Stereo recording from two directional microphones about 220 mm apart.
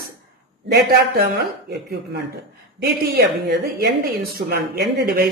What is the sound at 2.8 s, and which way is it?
Speech, 50° right (ahead or behind).